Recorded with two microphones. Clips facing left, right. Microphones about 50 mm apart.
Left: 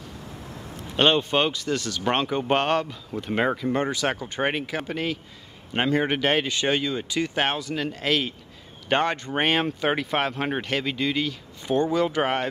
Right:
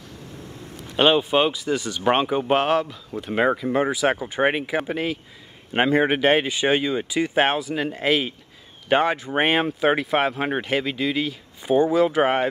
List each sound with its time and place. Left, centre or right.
0.9 s speech: centre